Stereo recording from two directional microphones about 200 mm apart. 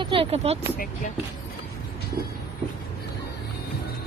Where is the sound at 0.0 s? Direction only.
25° right (ahead or behind).